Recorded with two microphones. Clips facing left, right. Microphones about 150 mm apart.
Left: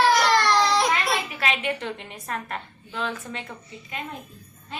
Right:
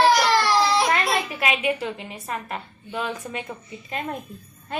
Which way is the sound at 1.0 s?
15° right (ahead or behind).